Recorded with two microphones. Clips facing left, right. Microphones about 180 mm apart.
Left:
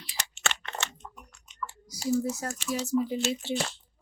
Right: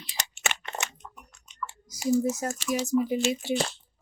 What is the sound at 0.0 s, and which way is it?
Crunch, 20° right (ahead or behind).